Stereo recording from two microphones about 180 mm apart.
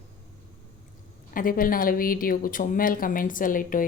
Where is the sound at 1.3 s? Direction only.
50° left (ahead or behind).